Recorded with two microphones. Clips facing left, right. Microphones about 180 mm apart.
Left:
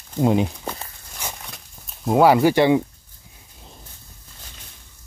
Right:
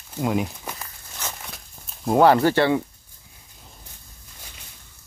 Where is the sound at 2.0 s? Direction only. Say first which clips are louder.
Left 1 dB; 5° left (ahead or behind).